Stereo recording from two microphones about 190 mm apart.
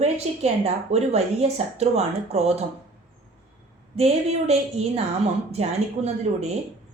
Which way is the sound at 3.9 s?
35° right (ahead or behind).